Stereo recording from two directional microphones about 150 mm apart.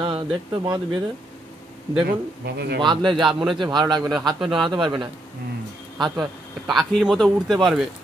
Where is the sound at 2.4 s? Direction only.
90° right.